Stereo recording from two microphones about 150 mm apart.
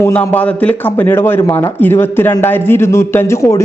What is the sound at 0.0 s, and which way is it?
A man's voice, 15° left (ahead or behind).